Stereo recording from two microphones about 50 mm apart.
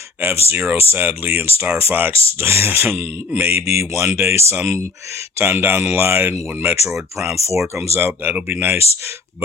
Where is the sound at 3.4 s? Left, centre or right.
Right.